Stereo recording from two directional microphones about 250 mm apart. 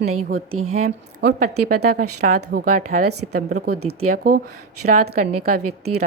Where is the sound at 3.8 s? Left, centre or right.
Right.